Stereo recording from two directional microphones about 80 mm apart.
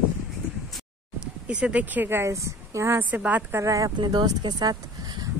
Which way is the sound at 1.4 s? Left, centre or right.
Centre.